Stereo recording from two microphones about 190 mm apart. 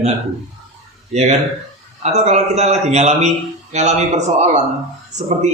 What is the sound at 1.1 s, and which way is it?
A man's voice, 35° right (ahead or behind).